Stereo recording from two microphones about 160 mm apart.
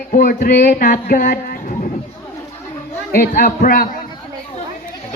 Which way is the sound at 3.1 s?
60° left (ahead or behind).